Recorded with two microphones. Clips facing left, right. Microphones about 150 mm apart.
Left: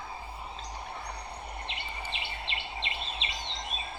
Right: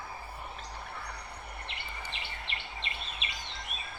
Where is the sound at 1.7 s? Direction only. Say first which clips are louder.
Left 3 dB; 20° left (ahead or behind).